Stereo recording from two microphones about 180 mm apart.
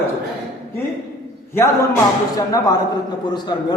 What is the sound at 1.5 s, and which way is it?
A man's voice, 15° left (ahead or behind).